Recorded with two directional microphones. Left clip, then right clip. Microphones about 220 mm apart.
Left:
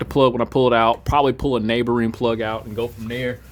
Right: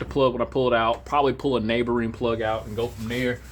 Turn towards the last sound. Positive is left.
turn(degrees=50)  # may be behind; listen again after turning